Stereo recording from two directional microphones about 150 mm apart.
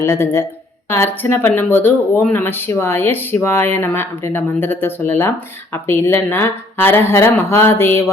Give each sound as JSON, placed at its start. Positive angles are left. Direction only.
{"t": 0.0, "sound": "speech", "side_deg": 20}